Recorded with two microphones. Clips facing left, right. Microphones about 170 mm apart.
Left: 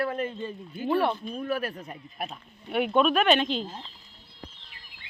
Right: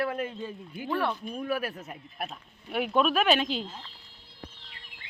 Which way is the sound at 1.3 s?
10° right (ahead or behind).